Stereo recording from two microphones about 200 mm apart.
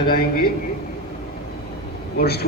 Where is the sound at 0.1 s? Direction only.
50° left (ahead or behind).